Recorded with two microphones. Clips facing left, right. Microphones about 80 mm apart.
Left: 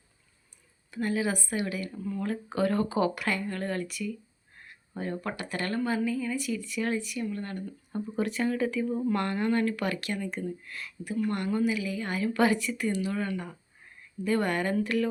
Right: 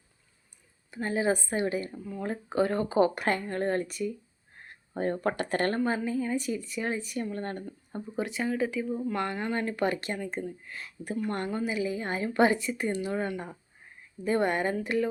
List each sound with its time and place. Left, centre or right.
0.9 s speech: right
7.6 s a woman's voice: centre